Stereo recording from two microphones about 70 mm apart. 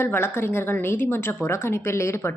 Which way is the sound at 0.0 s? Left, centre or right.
Left.